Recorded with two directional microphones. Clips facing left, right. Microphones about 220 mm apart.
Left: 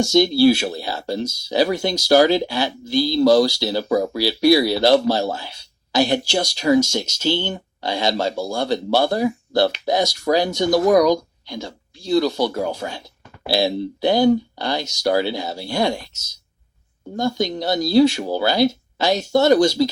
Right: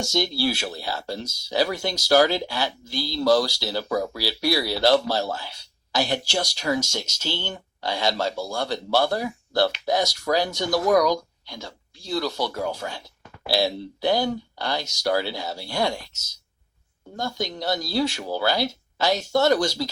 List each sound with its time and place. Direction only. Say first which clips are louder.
0.0 s speech: left 10 dB; 20° left (ahead or behind)
17.2 s speech: left 8 dB; 20° left (ahead or behind)